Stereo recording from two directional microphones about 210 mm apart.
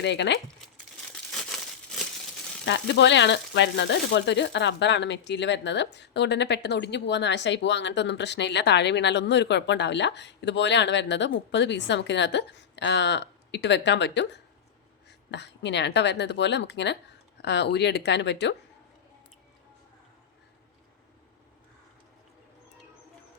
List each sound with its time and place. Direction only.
0.0 s speech: 55° left (ahead or behind)
2.6 s speech: 55° left (ahead or behind)